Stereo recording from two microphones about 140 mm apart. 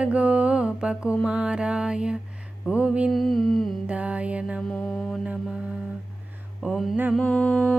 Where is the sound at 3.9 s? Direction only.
10° right (ahead or behind).